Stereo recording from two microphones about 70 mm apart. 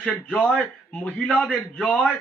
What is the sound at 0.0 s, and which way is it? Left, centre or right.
A man's voice, centre.